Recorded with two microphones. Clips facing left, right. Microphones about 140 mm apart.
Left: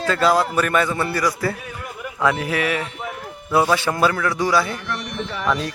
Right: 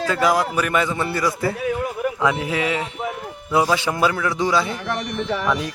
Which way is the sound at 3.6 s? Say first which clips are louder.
Left 1 dB; 10° right (ahead or behind).